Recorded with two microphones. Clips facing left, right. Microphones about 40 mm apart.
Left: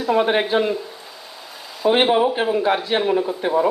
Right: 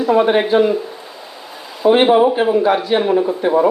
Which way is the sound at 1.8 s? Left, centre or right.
Centre.